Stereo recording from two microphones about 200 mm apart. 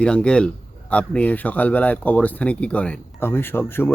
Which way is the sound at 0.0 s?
5° left (ahead or behind).